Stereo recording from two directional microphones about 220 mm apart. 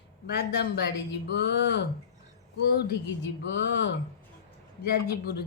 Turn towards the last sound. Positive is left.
turn(degrees=45)  # may be behind; listen again after turning